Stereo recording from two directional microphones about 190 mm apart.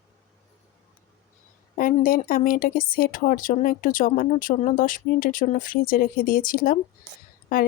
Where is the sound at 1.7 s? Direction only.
50° left (ahead or behind).